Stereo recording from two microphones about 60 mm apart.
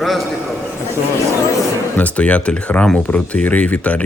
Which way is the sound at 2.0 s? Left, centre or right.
Left.